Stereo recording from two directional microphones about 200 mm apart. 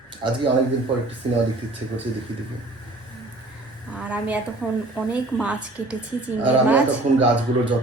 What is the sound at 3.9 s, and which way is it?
A woman's voice, 5° right (ahead or behind).